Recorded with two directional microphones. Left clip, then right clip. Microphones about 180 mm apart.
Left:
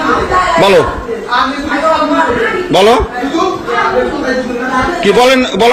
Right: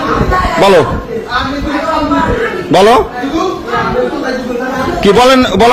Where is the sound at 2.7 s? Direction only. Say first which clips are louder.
Right 2 dB; 25° right (ahead or behind).